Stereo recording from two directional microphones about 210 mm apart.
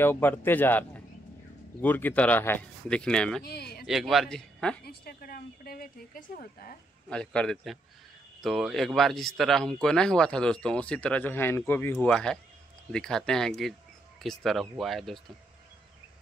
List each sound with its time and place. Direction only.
0.0 s speech: 10° left (ahead or behind)
3.4 s speech: 50° left (ahead or behind)
3.8 s speech: centre (ahead or behind)
4.8 s speech: 45° left (ahead or behind)
7.1 s speech: 5° left (ahead or behind)